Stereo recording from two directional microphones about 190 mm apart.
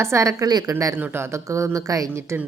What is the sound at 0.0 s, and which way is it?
Speech, 15° right (ahead or behind).